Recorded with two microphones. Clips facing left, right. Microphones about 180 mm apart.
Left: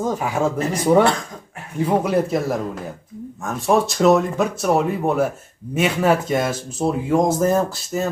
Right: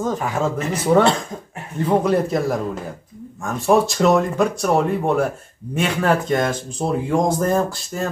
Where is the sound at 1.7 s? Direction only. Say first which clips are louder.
Right 1 dB; 10° left (ahead or behind).